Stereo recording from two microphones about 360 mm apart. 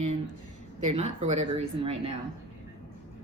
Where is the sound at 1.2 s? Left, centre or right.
Centre.